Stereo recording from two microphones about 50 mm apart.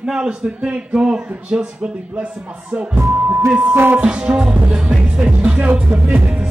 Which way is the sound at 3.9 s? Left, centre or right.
Centre.